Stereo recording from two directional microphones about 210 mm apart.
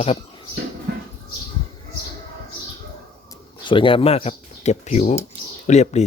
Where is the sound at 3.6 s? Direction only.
25° left (ahead or behind).